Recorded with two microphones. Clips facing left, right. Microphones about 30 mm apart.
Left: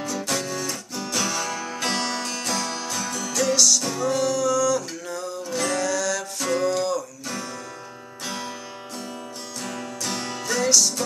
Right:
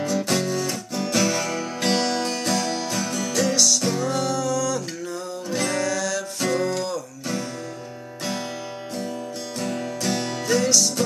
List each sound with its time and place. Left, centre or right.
0.2 s music: centre
3.8 s music: centre
9.6 s music: centre